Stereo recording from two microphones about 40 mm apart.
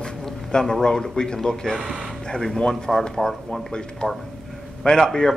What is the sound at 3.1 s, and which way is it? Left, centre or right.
Speech, centre.